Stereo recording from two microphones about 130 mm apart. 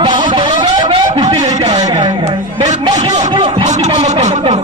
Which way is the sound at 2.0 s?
35° right (ahead or behind).